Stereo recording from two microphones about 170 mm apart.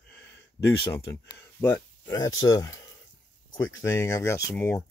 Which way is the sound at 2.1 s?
20° left (ahead or behind).